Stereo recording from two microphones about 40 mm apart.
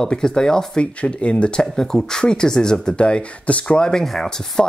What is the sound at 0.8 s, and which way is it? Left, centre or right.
Speech, left.